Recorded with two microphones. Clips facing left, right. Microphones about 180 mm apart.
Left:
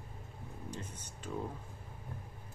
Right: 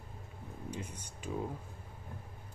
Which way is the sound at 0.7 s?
10° right (ahead or behind).